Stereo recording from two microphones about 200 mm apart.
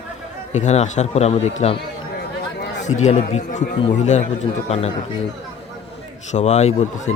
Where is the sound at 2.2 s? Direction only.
60° left (ahead or behind).